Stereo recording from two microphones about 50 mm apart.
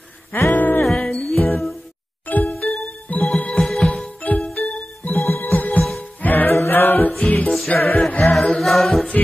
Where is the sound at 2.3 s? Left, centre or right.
Left.